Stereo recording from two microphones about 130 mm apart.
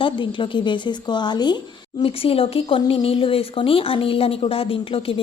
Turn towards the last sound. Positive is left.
turn(degrees=45)  # may be behind; listen again after turning